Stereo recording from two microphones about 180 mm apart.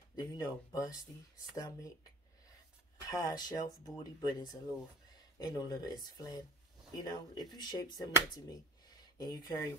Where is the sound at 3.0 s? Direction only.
20° left (ahead or behind).